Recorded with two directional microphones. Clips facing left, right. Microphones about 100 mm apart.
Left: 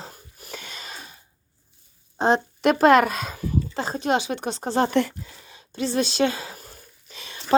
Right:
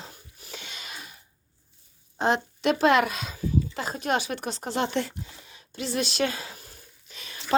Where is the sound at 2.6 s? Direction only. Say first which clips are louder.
Left 5 dB; 45° left (ahead or behind).